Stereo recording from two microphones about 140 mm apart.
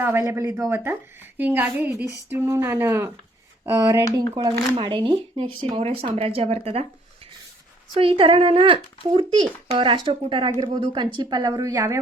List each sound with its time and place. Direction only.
0.0 s speech: 20° right (ahead or behind)
4.4 s speech: 35° right (ahead or behind)
7.9 s speech: 40° right (ahead or behind); by 11.9 s 25° right (ahead or behind)